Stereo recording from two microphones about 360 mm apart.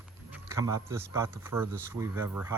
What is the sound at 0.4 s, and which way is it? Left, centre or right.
Speech, centre.